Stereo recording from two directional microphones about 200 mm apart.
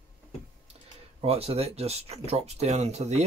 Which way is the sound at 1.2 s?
30° right (ahead or behind).